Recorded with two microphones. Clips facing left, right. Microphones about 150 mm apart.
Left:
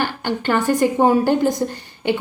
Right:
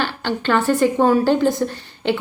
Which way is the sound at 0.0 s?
15° left (ahead or behind).